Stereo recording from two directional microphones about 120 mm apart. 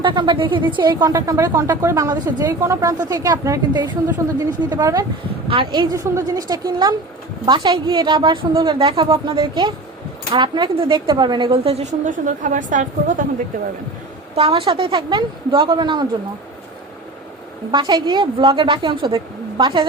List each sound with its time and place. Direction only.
0.0 s a woman's voice: 40° right (ahead or behind)
5.5 s a woman's voice: 45° right (ahead or behind)
6.0 s a woman's voice: 25° right (ahead or behind); by 13.2 s 90° right
14.3 s a woman's voice: 50° right (ahead or behind)
17.7 s a woman's voice: 40° right (ahead or behind)